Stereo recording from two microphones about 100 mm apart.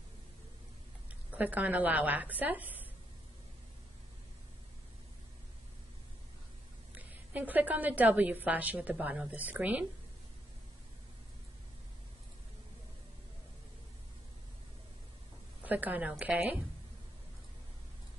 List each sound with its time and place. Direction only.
1.3 s a woman's voice: 15° right (ahead or behind)
7.0 s a woman's voice: 15° right (ahead or behind)
15.6 s a woman's voice: 15° right (ahead or behind)